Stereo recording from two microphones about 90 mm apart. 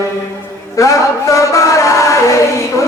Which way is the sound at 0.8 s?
35° left (ahead or behind).